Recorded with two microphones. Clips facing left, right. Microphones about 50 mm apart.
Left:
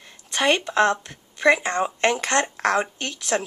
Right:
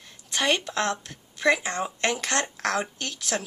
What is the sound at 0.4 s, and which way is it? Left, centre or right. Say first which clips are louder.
Speech: left 6 dB; centre.